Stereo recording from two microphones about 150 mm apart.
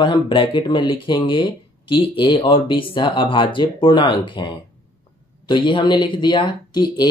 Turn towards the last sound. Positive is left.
turn(degrees=30)  # may be behind; listen again after turning